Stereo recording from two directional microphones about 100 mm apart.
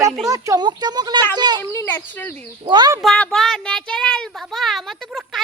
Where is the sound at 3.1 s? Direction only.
10° left (ahead or behind).